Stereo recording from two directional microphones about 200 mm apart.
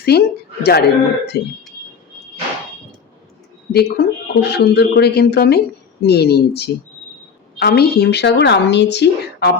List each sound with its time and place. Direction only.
0.0 s a woman's voice: 55° left (ahead or behind)
3.7 s speech: 55° left (ahead or behind)